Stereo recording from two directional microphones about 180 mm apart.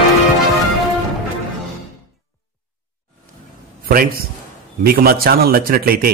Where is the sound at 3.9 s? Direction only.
55° right (ahead or behind).